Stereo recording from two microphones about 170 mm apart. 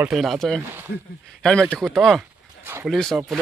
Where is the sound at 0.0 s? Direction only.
Centre (ahead or behind).